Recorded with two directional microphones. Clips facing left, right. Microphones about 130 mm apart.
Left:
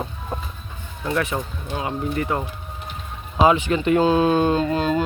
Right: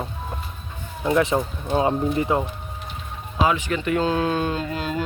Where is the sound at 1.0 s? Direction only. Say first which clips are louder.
Right 4 dB; 25° right (ahead or behind).